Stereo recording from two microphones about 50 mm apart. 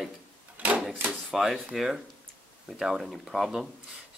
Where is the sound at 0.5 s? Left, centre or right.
Right.